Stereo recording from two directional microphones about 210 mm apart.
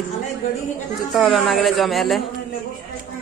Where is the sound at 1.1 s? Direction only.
Centre (ahead or behind).